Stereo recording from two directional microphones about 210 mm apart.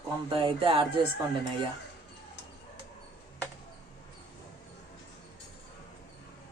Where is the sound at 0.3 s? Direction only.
25° right (ahead or behind).